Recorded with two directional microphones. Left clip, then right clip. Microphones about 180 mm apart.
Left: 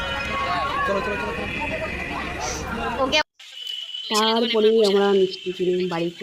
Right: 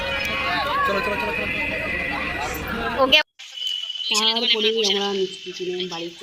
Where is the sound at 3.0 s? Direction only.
15° right (ahead or behind).